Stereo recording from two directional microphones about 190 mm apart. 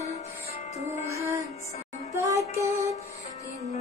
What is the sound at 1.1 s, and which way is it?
Music, 15° right (ahead or behind).